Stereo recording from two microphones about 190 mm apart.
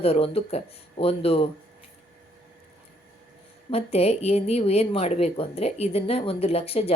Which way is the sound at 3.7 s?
30° left (ahead or behind).